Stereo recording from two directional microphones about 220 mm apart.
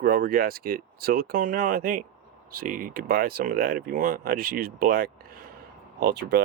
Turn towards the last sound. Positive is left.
turn(degrees=-45)  # may be behind; listen again after turning